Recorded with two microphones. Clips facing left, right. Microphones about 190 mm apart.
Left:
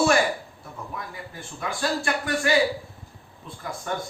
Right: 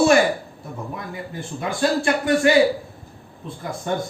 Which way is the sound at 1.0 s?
25° right (ahead or behind).